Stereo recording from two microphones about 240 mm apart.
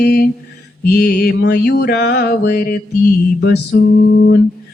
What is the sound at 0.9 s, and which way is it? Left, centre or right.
Music, left.